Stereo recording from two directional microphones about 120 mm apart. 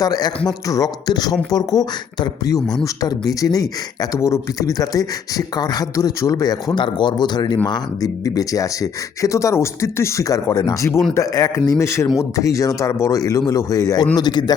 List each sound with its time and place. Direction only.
0.0 s speech: 35° left (ahead or behind)